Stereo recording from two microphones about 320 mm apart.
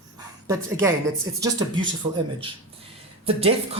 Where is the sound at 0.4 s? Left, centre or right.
Centre.